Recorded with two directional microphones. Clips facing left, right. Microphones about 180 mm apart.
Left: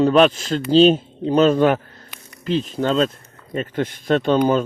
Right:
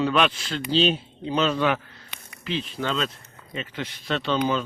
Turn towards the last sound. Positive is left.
turn(degrees=50)  # may be behind; listen again after turning